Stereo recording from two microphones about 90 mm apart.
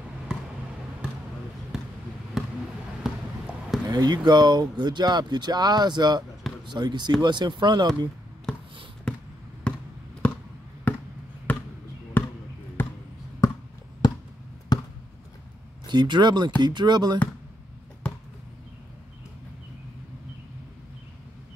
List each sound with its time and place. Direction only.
1.7 s basketball bounce: 5° right (ahead or behind)
3.8 s speech: 50° right (ahead or behind)
9.1 s basketball bounce: 10° left (ahead or behind)
9.7 s a sound: 10° left (ahead or behind)
11.5 s basketball bounce: 15° left (ahead or behind)
13.4 s a sound: 35° left (ahead or behind)
14.0 s a sound: 50° left (ahead or behind)
14.7 s basketball bounce: 45° left (ahead or behind)
15.9 s speech: 55° right (ahead or behind)
18.0 s basketball bounce: 10° left (ahead or behind)